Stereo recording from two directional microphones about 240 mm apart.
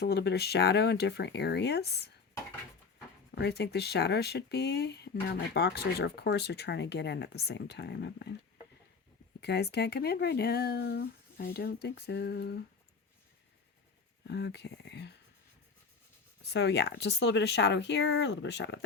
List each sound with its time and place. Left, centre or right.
0.0 s speech: left
3.3 s speech: left
9.4 s speech: left
14.3 s speech: left
16.4 s speech: left